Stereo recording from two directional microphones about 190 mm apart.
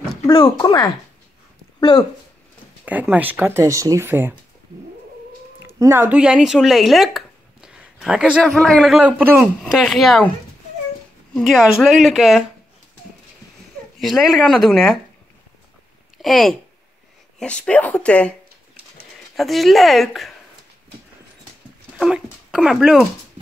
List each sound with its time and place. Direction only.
0.3 s speech: 25° left (ahead or behind)
2.8 s speech: 10° right (ahead or behind)
5.7 s speech: 15° right (ahead or behind); by 10.3 s centre (ahead or behind)
11.3 s speech: centre (ahead or behind)
13.9 s speech: centre (ahead or behind)
16.2 s speech: centre (ahead or behind)
19.3 s speech: centre (ahead or behind)
21.9 s speech: centre (ahead or behind)